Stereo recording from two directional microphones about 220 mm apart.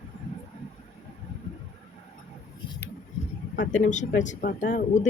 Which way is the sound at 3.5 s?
35° left (ahead or behind).